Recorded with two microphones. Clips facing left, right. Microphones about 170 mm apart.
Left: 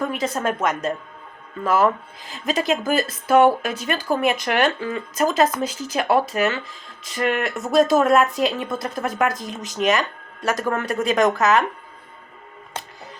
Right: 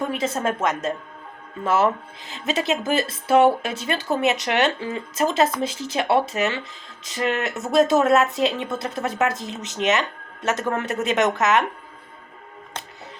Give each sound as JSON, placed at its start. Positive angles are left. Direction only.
{"t": 0.0, "sound": "a woman's voice", "side_deg": -25}